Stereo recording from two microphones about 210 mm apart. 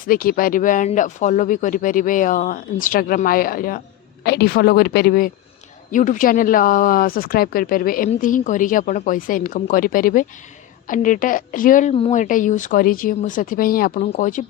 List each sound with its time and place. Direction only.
0.1 s speech: 45° left (ahead or behind)